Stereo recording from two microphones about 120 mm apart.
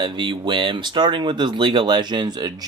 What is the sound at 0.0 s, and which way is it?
Speech, 40° right (ahead or behind).